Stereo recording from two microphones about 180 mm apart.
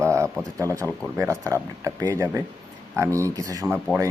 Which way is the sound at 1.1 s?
15° right (ahead or behind).